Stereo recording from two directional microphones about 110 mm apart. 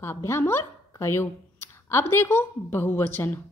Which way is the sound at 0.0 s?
20° left (ahead or behind).